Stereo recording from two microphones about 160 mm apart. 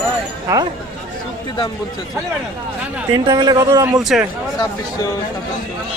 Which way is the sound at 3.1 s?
25° right (ahead or behind).